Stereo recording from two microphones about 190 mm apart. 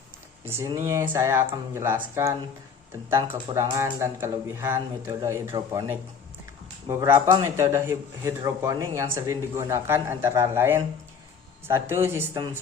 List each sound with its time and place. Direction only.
0.4 s speech: 10° right (ahead or behind)